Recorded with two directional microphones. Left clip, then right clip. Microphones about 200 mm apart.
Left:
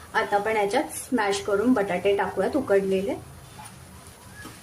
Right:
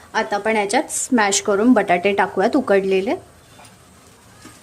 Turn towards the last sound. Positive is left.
turn(degrees=-45)  # may be behind; listen again after turning